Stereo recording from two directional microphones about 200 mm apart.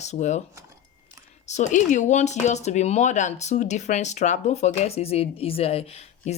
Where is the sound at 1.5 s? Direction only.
35° left (ahead or behind).